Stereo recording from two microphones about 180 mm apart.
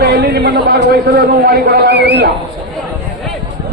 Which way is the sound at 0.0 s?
60° right (ahead or behind).